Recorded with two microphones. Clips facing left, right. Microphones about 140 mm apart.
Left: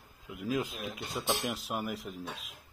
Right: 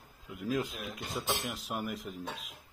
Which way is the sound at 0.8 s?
5° left (ahead or behind).